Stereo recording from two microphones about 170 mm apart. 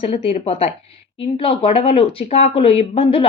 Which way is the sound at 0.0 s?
35° left (ahead or behind).